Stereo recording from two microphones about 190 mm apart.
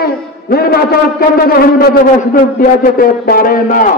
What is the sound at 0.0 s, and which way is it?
A man's voice, 55° left (ahead or behind).